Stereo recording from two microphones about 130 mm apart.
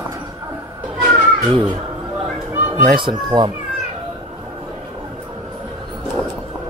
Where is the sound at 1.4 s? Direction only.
40° right (ahead or behind).